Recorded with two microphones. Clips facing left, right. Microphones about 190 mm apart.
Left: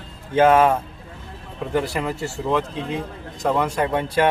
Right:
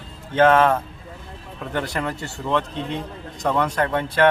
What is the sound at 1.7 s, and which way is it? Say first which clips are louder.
Speech: left 3 dB; 5° left (ahead or behind).